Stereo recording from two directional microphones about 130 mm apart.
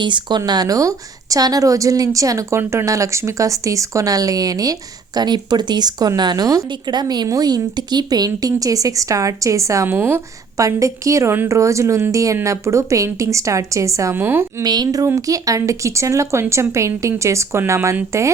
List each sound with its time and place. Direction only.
0.0 s a woman's voice: 35° right (ahead or behind); by 14.4 s 15° right (ahead or behind)
14.6 s a woman's voice: 30° right (ahead or behind)